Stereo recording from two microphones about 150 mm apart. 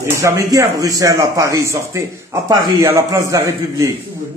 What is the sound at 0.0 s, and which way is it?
A man's voice, 20° right (ahead or behind).